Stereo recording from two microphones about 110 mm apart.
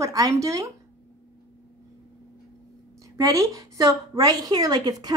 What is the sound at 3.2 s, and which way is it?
A woman's voice, 30° right (ahead or behind).